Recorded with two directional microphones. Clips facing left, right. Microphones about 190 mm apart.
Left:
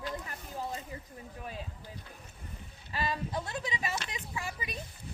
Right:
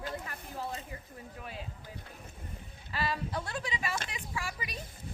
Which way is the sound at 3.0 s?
20° left (ahead or behind).